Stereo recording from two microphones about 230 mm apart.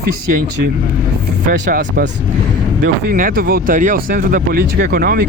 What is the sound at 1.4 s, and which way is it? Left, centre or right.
Speech, right.